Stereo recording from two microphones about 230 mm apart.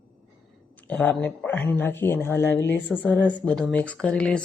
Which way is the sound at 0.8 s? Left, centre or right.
Centre.